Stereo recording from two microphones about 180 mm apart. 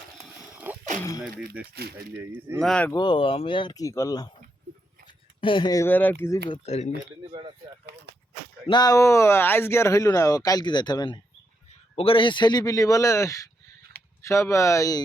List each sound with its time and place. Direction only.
0.2 s dog: 10° right (ahead or behind)
1.6 s speech: 10° right (ahead or behind)
2.6 s speech: 5° left (ahead or behind)
2.9 s speech: 25° left (ahead or behind); by 6.1 s 10° left (ahead or behind)
6.5 s speech: 40° left (ahead or behind)
7.3 s speech: 25° right (ahead or behind)
8.6 s speech: 25° left (ahead or behind)